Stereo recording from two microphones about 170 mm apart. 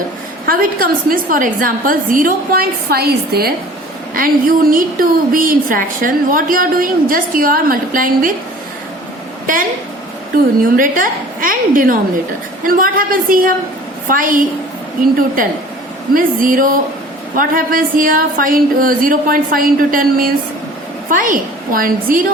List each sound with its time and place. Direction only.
0.4 s a woman's voice: 55° right (ahead or behind)
4.1 s a woman's voice: 55° right (ahead or behind)
10.6 s a woman's voice: 55° right (ahead or behind)
16.1 s a woman's voice: 55° right (ahead or behind)